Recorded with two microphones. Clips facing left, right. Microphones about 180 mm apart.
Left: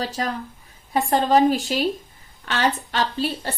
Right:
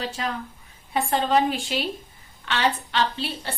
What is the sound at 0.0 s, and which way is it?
A woman's voice, 40° left (ahead or behind).